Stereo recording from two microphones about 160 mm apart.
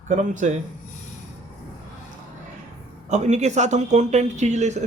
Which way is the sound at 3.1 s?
45° right (ahead or behind).